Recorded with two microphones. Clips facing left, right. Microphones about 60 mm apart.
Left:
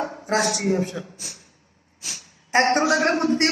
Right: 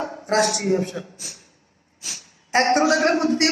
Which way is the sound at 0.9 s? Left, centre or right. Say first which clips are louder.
Right 1 dB; left.